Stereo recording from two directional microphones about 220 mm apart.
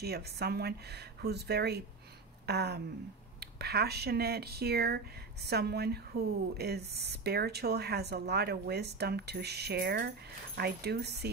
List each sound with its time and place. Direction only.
0.0 s speech: 45° right (ahead or behind)